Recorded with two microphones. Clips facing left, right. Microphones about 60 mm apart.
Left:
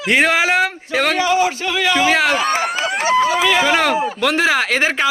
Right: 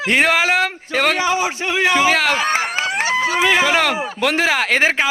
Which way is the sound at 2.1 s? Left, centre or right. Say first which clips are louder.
Left 1 dB; centre.